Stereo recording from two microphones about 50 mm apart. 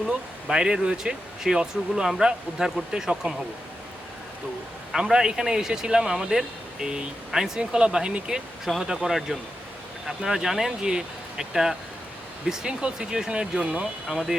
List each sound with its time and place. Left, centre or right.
0.4 s speech: centre
4.9 s speech: centre
14.1 s speech: centre